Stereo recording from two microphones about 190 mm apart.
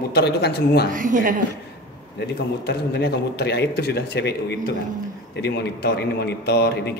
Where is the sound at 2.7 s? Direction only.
60° left (ahead or behind).